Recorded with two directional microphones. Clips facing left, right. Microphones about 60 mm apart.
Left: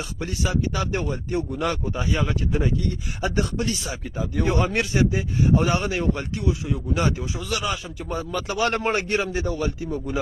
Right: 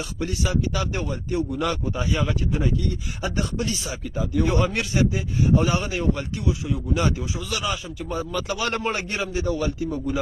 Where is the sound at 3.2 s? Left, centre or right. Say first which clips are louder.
Left 2 dB; left.